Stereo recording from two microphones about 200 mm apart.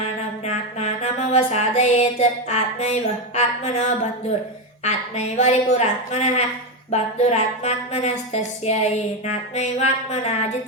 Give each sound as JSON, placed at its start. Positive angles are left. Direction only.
{"t": 0.0, "sound": "music", "side_deg": 30}
{"t": 4.8, "sound": "speech", "side_deg": 35}